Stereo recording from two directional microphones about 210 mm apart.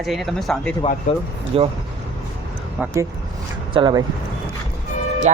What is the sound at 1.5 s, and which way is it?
Speech, 25° right (ahead or behind).